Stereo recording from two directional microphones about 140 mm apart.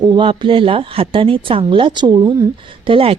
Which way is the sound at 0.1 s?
35° right (ahead or behind).